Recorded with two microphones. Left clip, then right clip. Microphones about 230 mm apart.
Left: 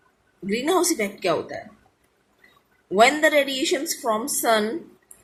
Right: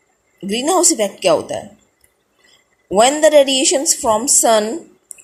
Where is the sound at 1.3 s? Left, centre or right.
Centre.